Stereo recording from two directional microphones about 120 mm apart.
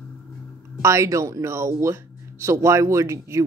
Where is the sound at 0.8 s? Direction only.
25° right (ahead or behind).